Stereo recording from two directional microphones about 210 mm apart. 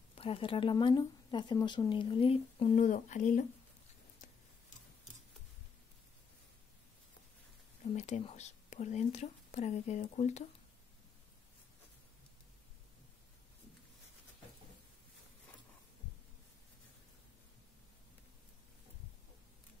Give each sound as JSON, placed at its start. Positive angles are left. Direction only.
{"t": 0.1, "sound": "speech", "side_deg": 25}
{"t": 7.9, "sound": "speech", "side_deg": 30}